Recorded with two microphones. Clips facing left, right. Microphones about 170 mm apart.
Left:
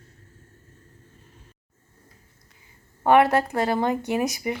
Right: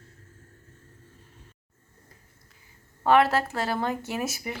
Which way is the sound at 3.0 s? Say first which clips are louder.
Left 3 dB; 15° left (ahead or behind).